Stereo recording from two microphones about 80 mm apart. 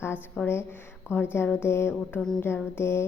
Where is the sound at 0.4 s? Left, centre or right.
Left.